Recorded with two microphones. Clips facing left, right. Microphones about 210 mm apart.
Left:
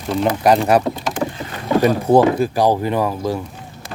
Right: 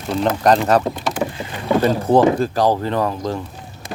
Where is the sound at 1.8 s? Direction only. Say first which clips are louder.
Left 1 dB; 10° left (ahead or behind).